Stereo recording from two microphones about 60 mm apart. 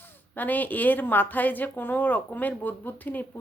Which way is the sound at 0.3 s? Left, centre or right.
Left.